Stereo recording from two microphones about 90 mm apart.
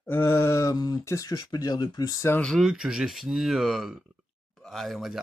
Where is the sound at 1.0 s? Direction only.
35° left (ahead or behind).